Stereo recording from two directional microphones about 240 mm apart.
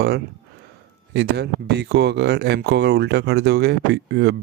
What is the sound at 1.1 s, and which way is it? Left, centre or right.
Speech, right.